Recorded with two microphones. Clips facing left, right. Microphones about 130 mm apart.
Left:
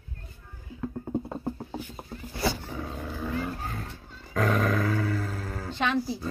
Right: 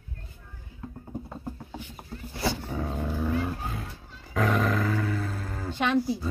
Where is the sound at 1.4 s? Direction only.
35° left (ahead or behind).